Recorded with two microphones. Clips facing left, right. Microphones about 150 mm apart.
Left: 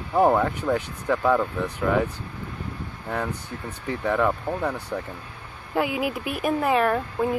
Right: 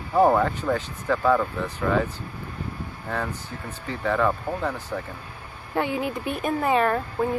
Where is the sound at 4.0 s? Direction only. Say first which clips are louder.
Even; 15° left (ahead or behind).